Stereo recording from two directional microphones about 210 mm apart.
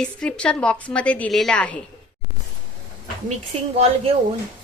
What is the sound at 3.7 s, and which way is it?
Speech, 30° right (ahead or behind).